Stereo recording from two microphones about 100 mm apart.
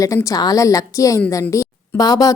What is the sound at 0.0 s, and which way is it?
A woman's voice, 30° left (ahead or behind).